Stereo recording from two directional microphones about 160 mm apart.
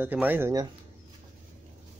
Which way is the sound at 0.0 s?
10° right (ahead or behind).